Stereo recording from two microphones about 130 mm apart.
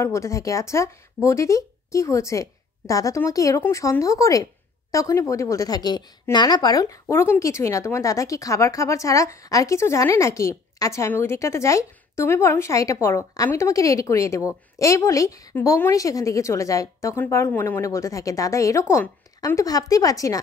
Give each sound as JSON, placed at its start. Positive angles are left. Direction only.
{"t": 0.0, "sound": "speech", "side_deg": 20}